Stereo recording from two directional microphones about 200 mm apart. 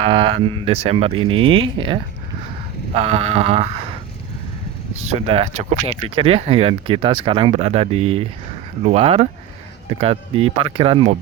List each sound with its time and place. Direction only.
0.0 s speech: 25° right (ahead or behind)
4.9 s speech: 30° right (ahead or behind)